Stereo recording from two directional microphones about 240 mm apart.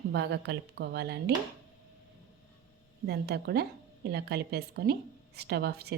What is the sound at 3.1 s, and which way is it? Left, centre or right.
A woman's voice, right.